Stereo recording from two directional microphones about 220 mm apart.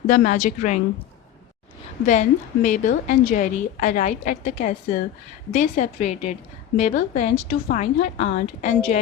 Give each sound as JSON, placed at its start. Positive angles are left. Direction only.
{"t": 0.1, "sound": "a woman's voice", "side_deg": 35}
{"t": 2.0, "sound": "a woman's voice", "side_deg": 35}